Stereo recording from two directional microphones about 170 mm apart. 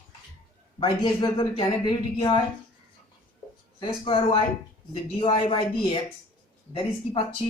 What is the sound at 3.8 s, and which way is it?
Speech, 30° left (ahead or behind).